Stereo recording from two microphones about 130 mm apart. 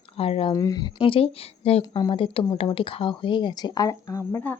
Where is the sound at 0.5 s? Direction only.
25° left (ahead or behind).